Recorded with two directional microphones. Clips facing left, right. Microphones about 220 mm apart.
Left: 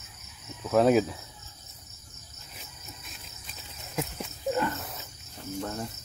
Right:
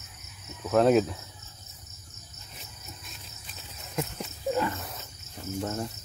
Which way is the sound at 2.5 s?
Centre (ahead or behind).